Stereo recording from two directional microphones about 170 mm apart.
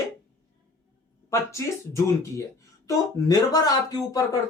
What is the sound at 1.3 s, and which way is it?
Speech, 15° left (ahead or behind).